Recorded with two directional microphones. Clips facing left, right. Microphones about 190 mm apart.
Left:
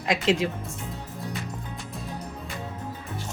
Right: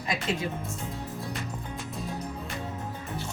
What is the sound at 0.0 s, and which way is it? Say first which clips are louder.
Speech: left 7 dB; 90° left.